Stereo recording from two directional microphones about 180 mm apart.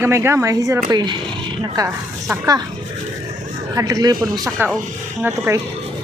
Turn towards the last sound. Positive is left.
turn(degrees=-15)  # may be behind; listen again after turning